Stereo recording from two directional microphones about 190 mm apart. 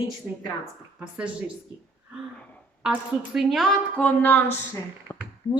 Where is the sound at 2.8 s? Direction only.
5° right (ahead or behind).